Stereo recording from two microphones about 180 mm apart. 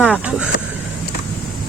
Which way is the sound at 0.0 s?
5° right (ahead or behind).